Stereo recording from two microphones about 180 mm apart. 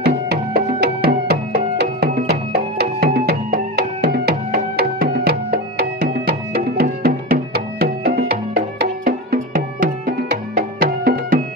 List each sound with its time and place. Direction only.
0.0 s music: 60° right (ahead or behind)